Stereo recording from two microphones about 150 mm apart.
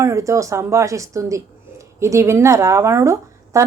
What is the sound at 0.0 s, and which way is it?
Speech, 20° right (ahead or behind).